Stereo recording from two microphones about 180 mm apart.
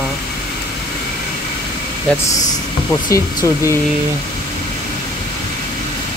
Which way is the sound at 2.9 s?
15° left (ahead or behind).